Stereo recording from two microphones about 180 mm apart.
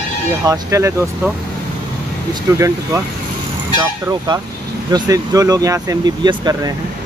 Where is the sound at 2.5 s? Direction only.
20° right (ahead or behind).